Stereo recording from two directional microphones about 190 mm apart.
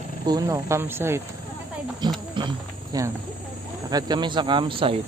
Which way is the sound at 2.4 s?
20° right (ahead or behind).